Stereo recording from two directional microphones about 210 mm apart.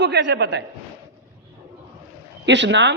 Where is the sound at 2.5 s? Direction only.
55° right (ahead or behind).